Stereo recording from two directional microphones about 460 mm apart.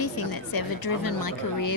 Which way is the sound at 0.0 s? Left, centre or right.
Left.